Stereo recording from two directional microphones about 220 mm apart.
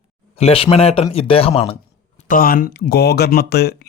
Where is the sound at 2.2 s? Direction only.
40° left (ahead or behind).